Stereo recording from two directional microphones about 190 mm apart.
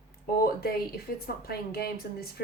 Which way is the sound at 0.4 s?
55° left (ahead or behind).